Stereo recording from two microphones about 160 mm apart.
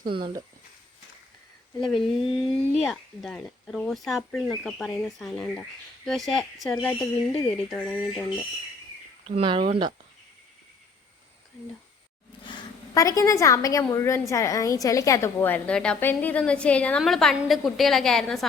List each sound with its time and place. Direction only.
0.1 s speech: 35° right (ahead or behind)
1.9 s speech: centre (ahead or behind)
9.2 s speech: 35° right (ahead or behind)
12.9 s a woman's voice: 20° left (ahead or behind); by 18.4 s centre (ahead or behind)